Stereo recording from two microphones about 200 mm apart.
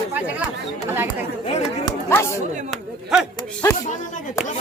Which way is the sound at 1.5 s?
35° left (ahead or behind).